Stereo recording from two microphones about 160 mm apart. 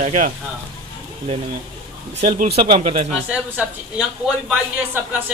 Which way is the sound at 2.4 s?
60° right (ahead or behind).